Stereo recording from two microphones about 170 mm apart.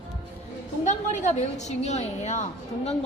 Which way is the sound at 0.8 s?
45° left (ahead or behind).